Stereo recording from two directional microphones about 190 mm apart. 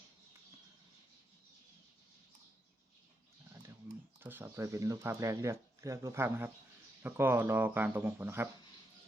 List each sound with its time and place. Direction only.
4.2 s speech: 10° right (ahead or behind)